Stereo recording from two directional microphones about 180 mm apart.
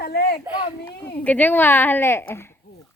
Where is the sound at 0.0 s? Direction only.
65° left (ahead or behind).